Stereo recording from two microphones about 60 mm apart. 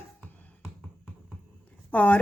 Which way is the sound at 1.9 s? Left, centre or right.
Left.